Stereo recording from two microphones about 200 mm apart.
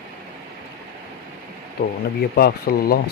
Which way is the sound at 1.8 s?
50° left (ahead or behind).